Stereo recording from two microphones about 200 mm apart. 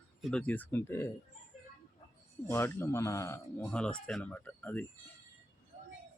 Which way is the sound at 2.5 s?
10° left (ahead or behind).